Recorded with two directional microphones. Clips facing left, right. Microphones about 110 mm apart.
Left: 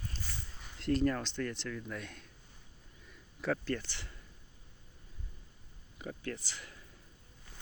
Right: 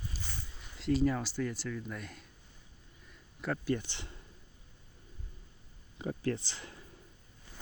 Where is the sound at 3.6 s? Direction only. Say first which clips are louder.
Right 3 dB; 15° right (ahead or behind).